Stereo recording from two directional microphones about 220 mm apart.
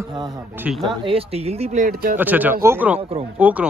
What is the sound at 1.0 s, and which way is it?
Speech, 25° right (ahead or behind).